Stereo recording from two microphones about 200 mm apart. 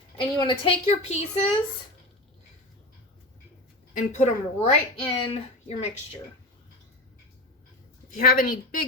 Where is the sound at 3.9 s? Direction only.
40° left (ahead or behind).